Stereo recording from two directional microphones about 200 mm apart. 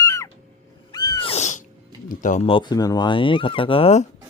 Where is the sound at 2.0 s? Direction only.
40° left (ahead or behind).